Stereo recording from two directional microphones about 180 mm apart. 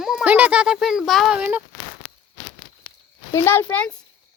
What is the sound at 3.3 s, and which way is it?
Speech, 15° left (ahead or behind).